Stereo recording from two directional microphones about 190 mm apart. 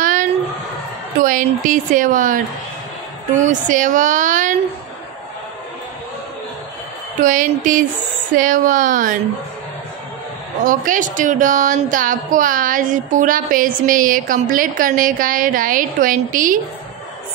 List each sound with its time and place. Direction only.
0.0 s a sound: 45° right (ahead or behind)
1.2 s a woman's voice: 45° right (ahead or behind)
7.2 s a woman's voice: 45° right (ahead or behind)
10.6 s a woman's voice: 45° right (ahead or behind)